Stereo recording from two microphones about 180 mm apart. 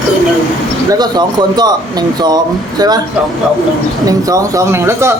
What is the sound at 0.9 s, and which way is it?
A woman's voice, 20° right (ahead or behind).